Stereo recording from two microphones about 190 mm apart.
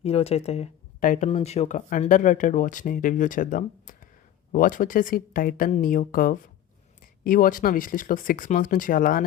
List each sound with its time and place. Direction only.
0.0 s speech: 30° left (ahead or behind)